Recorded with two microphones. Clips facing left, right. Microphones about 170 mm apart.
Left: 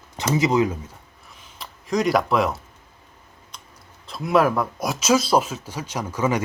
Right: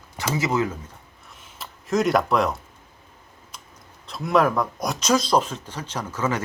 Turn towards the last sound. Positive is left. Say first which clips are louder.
# left 3 dB
turn(degrees=15)  # may be behind; listen again after turning